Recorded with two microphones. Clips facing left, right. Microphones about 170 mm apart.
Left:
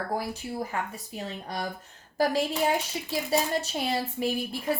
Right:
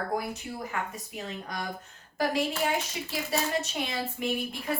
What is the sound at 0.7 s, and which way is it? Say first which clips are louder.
Speech: left 2 dB; 30° left (ahead or behind).